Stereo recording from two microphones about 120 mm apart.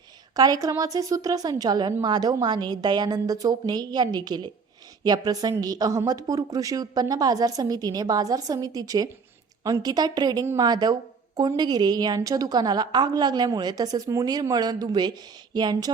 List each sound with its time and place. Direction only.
0.3 s a woman's voice: 30° right (ahead or behind)